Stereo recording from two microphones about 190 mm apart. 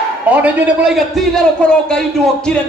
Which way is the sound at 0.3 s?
5° right (ahead or behind).